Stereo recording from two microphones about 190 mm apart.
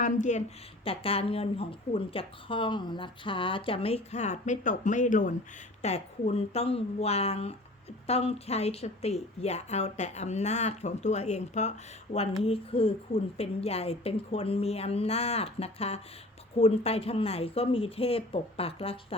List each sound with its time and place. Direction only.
0.0 s speech: 40° left (ahead or behind)